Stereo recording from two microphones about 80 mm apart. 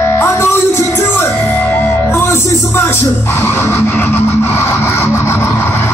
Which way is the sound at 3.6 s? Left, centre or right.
Left.